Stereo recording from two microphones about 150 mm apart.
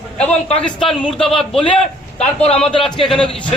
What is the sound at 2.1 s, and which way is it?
Speech, 40° left (ahead or behind).